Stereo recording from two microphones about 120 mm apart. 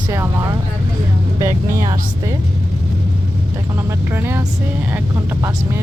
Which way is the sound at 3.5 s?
25° right (ahead or behind).